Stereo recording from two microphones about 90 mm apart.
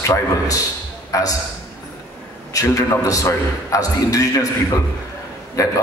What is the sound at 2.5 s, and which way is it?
A man's voice, 40° left (ahead or behind).